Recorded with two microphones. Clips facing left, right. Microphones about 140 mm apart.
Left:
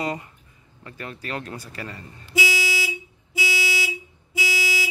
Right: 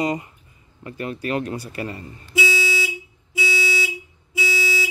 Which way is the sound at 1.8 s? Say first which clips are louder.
Right 6 dB; 25° right (ahead or behind).